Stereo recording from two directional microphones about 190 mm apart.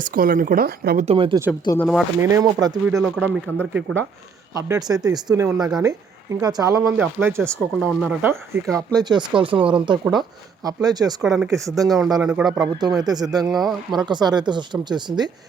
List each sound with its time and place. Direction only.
0.0 s speech: 50° right (ahead or behind)
1.0 s speech: 30° right (ahead or behind)
1.6 s speech: 15° left (ahead or behind)
2.2 s speech: 15° right (ahead or behind)
3.0 s speech: 5° right (ahead or behind)
4.5 s speech: 20° right (ahead or behind)
8.7 s speech: 20° right (ahead or behind)
11.2 s a man's voice: 5° right (ahead or behind)
11.5 s speech: 15° right (ahead or behind)
12.2 s a man's voice: 5° right (ahead or behind)
13.0 s speech: 20° right (ahead or behind)
13.5 s a man's voice: centre (ahead or behind)
13.9 s speech: 20° right (ahead or behind)